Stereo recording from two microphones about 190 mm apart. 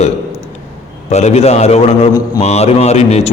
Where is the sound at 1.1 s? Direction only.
35° left (ahead or behind).